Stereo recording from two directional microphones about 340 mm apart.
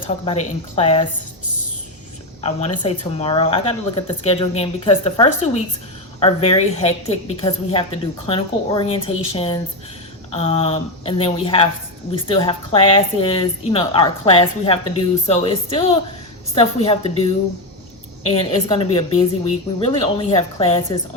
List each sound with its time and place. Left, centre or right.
0.3 s speech: centre
2.4 s speech: centre